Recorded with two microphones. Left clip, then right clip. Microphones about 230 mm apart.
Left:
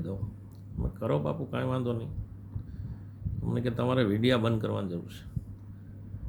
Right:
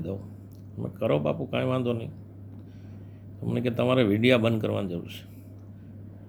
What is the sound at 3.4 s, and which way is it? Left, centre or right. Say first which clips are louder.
A man's voice: right 5 dB; centre.